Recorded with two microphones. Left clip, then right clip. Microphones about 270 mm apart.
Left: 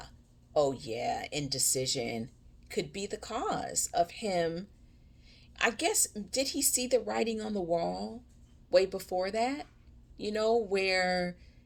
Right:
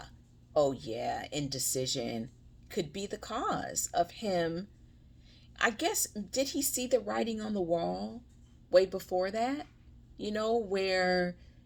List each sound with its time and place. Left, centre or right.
0.5 s speech: centre